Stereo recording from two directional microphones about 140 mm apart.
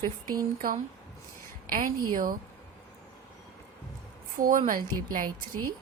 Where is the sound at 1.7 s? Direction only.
80° right.